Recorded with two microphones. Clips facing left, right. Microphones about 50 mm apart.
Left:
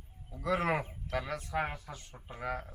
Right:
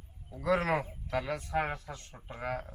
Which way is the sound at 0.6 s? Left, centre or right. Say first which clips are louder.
Right 1 dB; centre.